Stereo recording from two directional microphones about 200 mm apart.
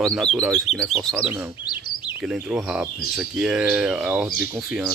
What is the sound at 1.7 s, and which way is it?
Chirp, 20° left (ahead or behind).